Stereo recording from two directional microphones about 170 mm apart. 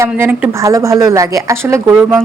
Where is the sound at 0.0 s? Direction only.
10° right (ahead or behind).